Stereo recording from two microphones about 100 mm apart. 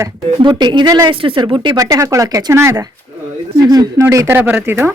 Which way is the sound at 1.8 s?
35° right (ahead or behind).